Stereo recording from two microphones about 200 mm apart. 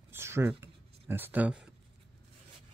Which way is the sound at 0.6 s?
10° right (ahead or behind).